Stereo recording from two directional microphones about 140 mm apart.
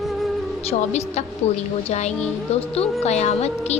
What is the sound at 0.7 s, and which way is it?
A woman's voice, 50° left (ahead or behind).